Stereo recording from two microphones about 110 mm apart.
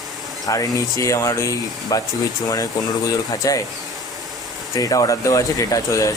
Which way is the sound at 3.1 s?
30° left (ahead or behind).